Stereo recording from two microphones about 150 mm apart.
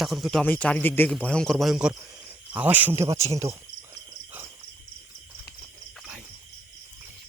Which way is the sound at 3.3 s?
20° right (ahead or behind).